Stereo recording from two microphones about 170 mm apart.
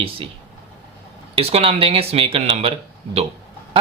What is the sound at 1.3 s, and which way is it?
Speech, 35° right (ahead or behind).